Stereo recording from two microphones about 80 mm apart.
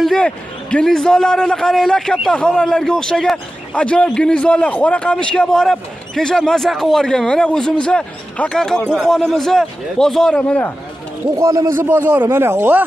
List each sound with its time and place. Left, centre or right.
0.0 s a man's voice: centre
11.3 s speech: right